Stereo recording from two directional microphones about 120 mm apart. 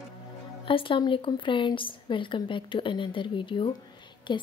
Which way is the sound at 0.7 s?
45° left (ahead or behind).